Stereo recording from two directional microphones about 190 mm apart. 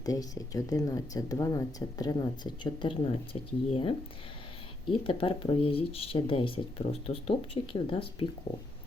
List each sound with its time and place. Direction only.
0.0 s speech: 20° left (ahead or behind)